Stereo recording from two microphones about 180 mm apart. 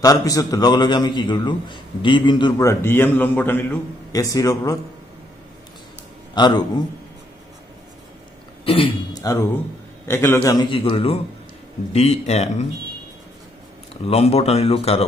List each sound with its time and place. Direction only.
0.0 s a man's voice: 20° left (ahead or behind)
6.3 s a man's voice: 25° left (ahead or behind)
8.6 s a man's voice: 30° left (ahead or behind)
14.0 s speech: 35° left (ahead or behind)